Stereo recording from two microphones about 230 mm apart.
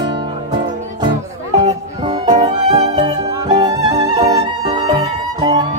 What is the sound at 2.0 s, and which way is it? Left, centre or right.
Music, right.